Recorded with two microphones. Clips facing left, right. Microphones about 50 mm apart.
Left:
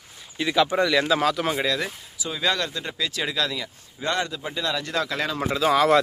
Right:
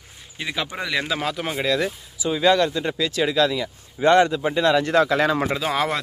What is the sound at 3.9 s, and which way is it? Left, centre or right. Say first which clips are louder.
Speech: right 10 dB; right.